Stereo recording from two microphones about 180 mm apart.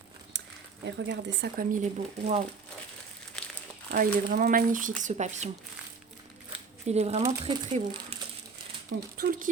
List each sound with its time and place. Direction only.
0.9 s speech: 75° right (ahead or behind)
1.7 s speech: 40° right (ahead or behind)
3.4 s crumpling: 5° left (ahead or behind)
3.9 s speech: 50° right (ahead or behind)
6.8 s speech: 40° right (ahead or behind)
9.1 s speech: 55° right (ahead or behind)